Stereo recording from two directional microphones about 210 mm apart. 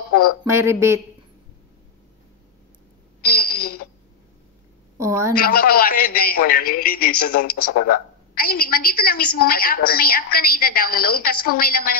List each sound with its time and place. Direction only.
0.5 s speech: 10° right (ahead or behind)
3.2 s a sound: 45° left (ahead or behind)
4.9 s a woman's voice: 15° right (ahead or behind)
5.3 s a man's voice: 45° left (ahead or behind)